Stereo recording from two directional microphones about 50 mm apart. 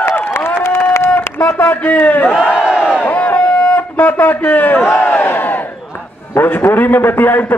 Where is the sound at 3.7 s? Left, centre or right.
Left.